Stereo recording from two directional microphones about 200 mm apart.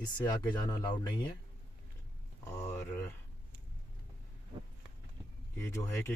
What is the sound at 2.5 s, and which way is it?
Speech, 15° left (ahead or behind).